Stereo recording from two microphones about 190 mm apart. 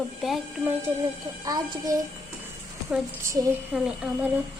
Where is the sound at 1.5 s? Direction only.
20° right (ahead or behind).